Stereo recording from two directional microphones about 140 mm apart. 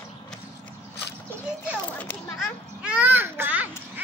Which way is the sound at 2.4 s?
10° right (ahead or behind).